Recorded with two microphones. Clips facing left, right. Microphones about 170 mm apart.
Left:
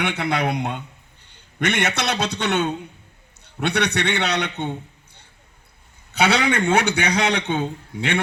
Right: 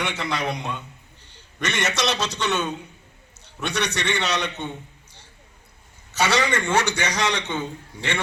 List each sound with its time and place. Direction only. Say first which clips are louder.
0.0 s a man's voice: left 4 dB; 60° left (ahead or behind)
6.1 s a man's voice: left 3 dB; 60° left (ahead or behind)